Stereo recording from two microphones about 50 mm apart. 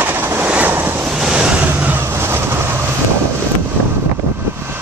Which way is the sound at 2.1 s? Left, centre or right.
Right.